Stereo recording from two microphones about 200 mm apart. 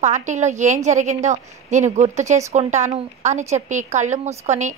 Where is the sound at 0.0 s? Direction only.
35° right (ahead or behind).